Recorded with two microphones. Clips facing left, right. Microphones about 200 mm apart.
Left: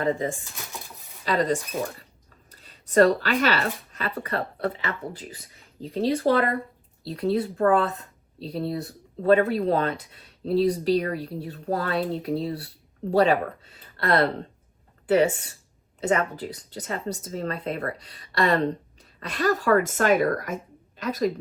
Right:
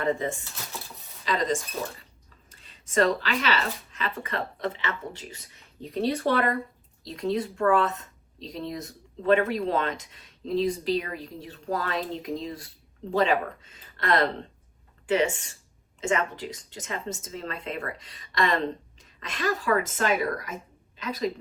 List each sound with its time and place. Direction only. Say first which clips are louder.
0.0 s speech: left 2 dB; 35° left (ahead or behind)
1.2 s speech: left 3 dB; 45° left (ahead or behind)